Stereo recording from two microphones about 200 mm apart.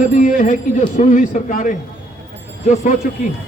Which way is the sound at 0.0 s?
40° left (ahead or behind).